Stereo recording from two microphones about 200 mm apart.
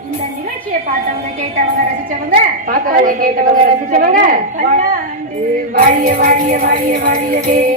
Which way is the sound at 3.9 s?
45° right (ahead or behind).